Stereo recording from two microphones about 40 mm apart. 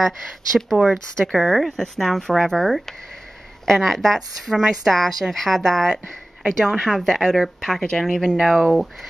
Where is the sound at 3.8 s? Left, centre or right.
Centre.